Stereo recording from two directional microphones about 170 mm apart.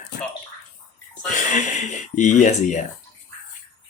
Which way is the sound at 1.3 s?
45° left (ahead or behind).